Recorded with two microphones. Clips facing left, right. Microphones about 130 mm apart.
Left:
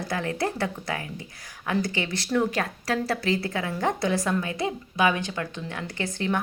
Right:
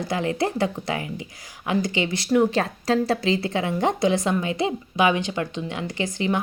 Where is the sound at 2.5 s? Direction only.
25° right (ahead or behind).